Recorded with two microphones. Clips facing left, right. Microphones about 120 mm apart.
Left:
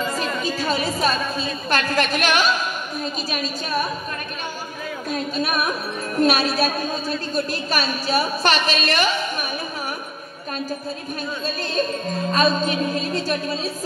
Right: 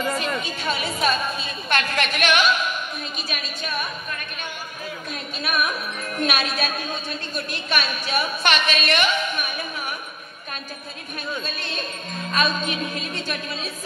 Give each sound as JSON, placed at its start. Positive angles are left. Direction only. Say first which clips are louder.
{"t": 0.2, "sound": "a woman's voice", "louder": "left 3 dB", "side_deg": 35}
{"t": 3.3, "sound": "music", "louder": "left 5 dB", "side_deg": 35}
{"t": 5.1, "sound": "music", "louder": "left 5 dB", "side_deg": 35}
{"t": 11.4, "sound": "music", "louder": "left 8 dB", "side_deg": 35}